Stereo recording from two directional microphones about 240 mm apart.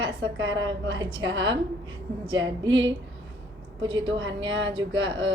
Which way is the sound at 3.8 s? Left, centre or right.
Right.